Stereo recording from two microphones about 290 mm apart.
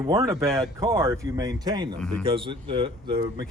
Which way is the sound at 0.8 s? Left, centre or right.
Centre.